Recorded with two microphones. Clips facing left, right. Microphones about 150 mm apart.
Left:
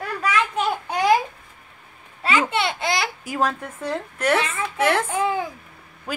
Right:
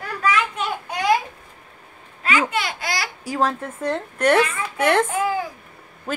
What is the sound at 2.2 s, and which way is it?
Babbling, 25° left (ahead or behind).